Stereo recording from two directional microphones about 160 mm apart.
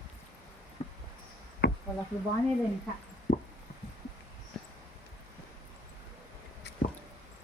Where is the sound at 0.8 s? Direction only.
40° left (ahead or behind).